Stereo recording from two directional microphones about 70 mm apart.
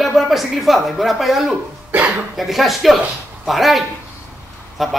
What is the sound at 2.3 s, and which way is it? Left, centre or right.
A man's voice, centre.